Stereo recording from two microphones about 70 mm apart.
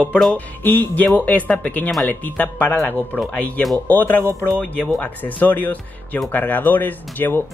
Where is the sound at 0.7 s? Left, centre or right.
Left.